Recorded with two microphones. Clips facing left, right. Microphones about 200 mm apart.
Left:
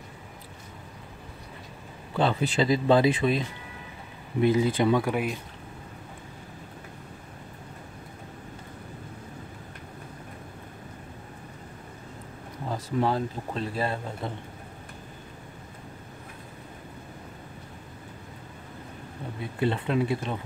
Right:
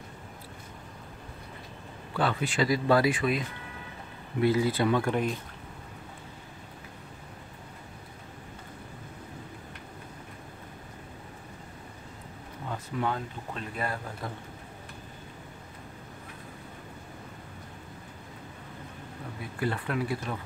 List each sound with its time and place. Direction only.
2.1 s speech: 25° left (ahead or behind)
5.0 s speech: 10° left (ahead or behind)
12.6 s speech: 35° left (ahead or behind)
19.4 s speech: 25° left (ahead or behind)